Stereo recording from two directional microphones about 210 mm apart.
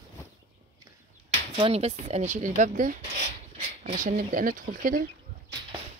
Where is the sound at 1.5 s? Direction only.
25° right (ahead or behind).